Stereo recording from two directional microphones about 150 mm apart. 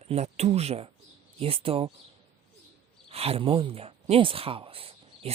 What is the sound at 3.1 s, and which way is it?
Speech, 40° right (ahead or behind).